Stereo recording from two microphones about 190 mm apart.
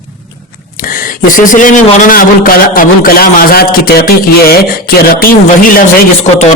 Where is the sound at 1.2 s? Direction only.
45° left (ahead or behind).